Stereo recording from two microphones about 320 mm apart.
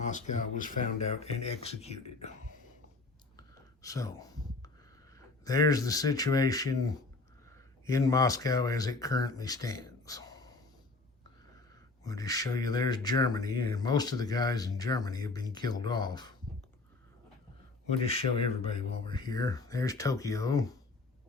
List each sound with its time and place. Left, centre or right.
0.0 s speech: left
3.3 s whispering: centre
5.1 s speech: centre
12.0 s speech: centre
17.8 s speech: centre